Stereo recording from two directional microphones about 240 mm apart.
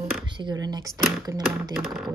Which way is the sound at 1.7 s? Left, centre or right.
Centre.